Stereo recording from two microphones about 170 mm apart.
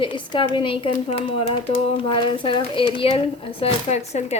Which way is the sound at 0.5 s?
30° left (ahead or behind).